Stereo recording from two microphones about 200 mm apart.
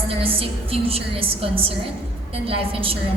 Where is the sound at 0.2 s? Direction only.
30° right (ahead or behind).